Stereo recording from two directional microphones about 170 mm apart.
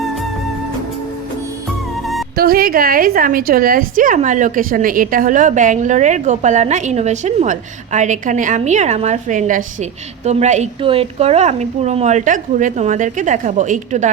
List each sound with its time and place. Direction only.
2.3 s a woman's voice: 65° right (ahead or behind); by 14.1 s 45° right (ahead or behind)